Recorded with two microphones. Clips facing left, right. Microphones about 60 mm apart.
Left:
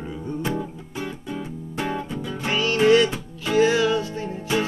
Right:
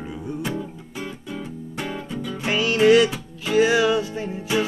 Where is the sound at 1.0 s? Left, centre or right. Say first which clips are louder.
Left 2 dB; centre.